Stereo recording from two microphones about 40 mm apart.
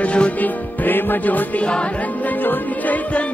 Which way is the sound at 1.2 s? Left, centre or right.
Left.